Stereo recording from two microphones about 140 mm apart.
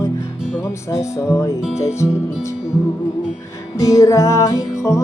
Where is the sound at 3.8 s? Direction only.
25° left (ahead or behind).